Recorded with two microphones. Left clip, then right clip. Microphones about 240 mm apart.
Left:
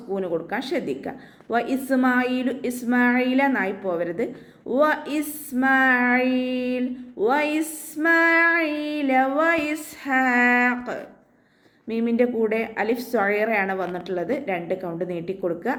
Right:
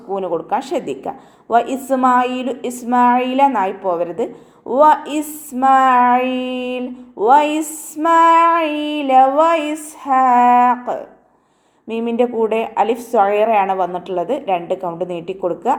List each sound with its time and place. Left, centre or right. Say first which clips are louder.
0.1 s a woman's voice: right 7 dB; right
2.0 s female singing: right 9 dB; right
2.8 s a woman's voice: right 8 dB; right
5.5 s female singing: right 8 dB; right
11.9 s a woman's voice: right 5 dB; right